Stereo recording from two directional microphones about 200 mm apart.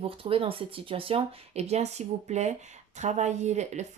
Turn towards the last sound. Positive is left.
turn(degrees=-35)  # may be behind; listen again after turning